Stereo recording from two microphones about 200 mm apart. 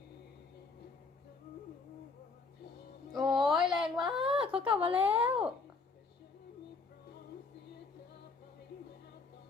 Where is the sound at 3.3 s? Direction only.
Centre (ahead or behind).